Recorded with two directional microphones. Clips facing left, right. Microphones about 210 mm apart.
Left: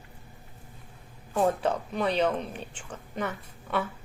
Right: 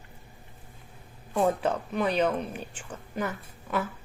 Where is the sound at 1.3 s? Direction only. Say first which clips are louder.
Even; centre (ahead or behind).